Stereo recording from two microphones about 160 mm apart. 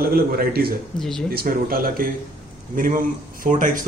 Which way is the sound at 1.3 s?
65° right (ahead or behind).